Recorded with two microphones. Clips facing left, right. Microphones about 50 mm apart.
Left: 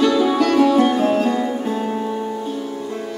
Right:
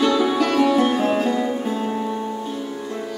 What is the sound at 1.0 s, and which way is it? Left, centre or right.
Music, centre.